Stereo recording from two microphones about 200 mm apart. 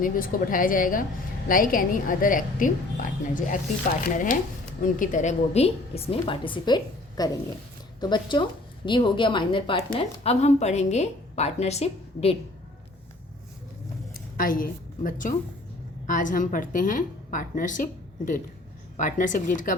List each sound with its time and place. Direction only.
0.0 s a woman's voice: 45° left (ahead or behind)
14.3 s a woman's voice: 45° left (ahead or behind)
18.9 s a woman's voice: 40° left (ahead or behind)